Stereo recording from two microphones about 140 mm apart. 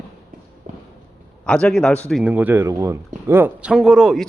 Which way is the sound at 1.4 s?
5° left (ahead or behind).